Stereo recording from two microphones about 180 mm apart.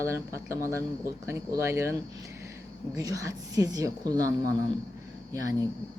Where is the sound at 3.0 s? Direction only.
20° right (ahead or behind).